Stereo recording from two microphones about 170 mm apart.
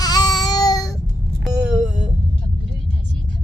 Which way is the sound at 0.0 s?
25° left (ahead or behind).